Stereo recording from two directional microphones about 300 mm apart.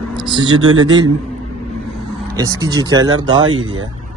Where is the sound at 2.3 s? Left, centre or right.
Centre.